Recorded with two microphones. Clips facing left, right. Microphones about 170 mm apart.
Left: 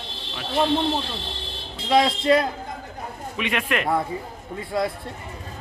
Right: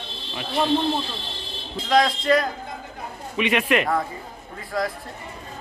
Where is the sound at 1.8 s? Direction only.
25° left (ahead or behind).